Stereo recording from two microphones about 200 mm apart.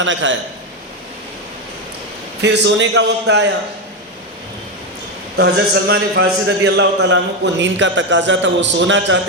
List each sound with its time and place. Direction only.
0.0 s a man's voice: 70° right (ahead or behind)
2.4 s a man's voice: 60° right (ahead or behind)
5.4 s a man's voice: 55° right (ahead or behind)